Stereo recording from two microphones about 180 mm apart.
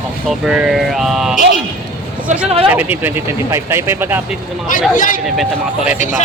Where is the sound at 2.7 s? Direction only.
10° right (ahead or behind).